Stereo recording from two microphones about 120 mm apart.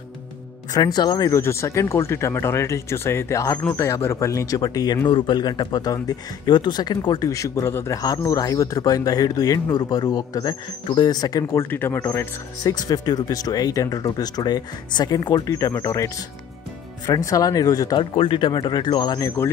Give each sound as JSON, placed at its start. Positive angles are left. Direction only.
{"t": 0.7, "sound": "speech", "side_deg": 35}
{"t": 11.7, "sound": "speech", "side_deg": 20}
{"t": 18.1, "sound": "speech", "side_deg": 45}